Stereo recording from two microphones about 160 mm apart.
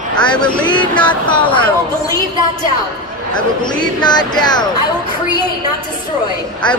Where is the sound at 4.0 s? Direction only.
25° left (ahead or behind).